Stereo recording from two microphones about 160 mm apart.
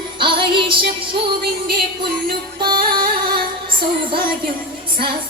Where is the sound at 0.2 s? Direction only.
30° right (ahead or behind).